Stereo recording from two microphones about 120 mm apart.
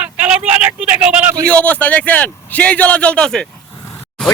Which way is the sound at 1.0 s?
10° right (ahead or behind).